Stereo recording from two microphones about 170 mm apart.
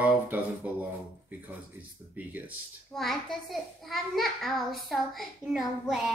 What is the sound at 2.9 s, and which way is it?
A child's voice, centre (ahead or behind).